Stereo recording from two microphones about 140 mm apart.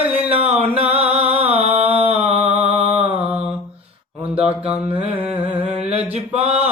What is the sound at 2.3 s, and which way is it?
Mantra, 40° right (ahead or behind).